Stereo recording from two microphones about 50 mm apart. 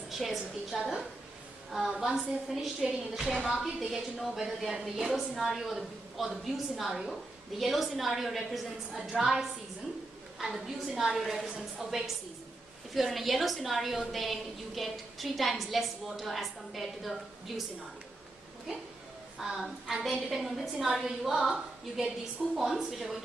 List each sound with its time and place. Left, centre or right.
0.1 s a woman's voice: centre
3.3 s a woman's voice: right
3.6 s a woman's voice: centre
5.1 s a woman's voice: centre
19.3 s a woman's voice: centre